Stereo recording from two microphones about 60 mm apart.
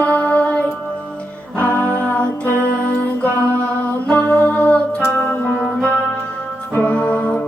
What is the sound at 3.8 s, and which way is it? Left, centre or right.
Music, left.